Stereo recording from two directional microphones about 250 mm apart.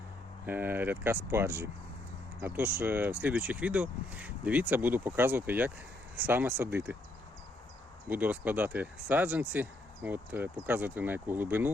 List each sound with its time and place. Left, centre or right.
0.4 s speech: centre
8.0 s speech: centre